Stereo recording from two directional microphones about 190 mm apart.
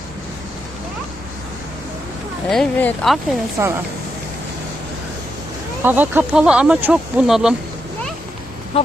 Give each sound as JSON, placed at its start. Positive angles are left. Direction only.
{"t": 2.5, "sound": "speech", "side_deg": 5}
{"t": 3.6, "sound": "speech", "side_deg": -15}
{"t": 5.8, "sound": "speech", "side_deg": -10}
{"t": 8.7, "sound": "duck", "side_deg": 30}